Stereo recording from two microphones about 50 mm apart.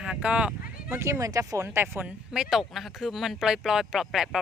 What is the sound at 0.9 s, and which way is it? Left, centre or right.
Speech, right.